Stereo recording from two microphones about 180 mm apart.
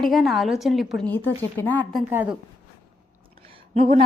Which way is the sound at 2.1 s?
10° right (ahead or behind).